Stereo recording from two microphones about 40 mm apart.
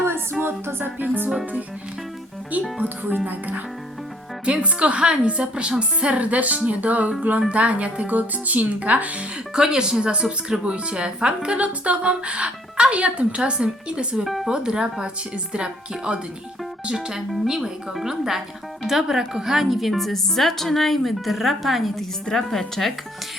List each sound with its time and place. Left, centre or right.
0.4 s music: right
2.8 s speech: right
4.4 s a woman's voice: right
9.6 s a woman's voice: centre
22.3 s speech: centre